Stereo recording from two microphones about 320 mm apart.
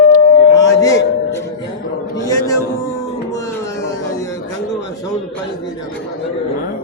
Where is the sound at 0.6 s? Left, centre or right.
Centre.